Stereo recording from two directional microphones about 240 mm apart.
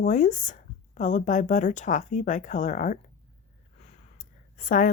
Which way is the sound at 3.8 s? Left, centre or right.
Left.